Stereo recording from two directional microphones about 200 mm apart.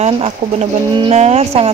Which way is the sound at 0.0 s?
30° right (ahead or behind).